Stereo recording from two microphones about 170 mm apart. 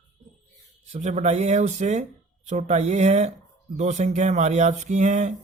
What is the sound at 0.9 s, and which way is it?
Speech, 45° right (ahead or behind).